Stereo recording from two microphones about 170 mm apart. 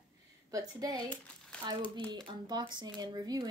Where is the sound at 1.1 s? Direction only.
5° left (ahead or behind).